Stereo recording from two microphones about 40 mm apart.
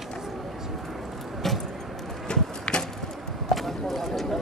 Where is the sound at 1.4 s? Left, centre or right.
Centre.